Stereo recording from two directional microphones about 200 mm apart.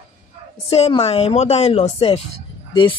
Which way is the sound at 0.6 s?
30° left (ahead or behind).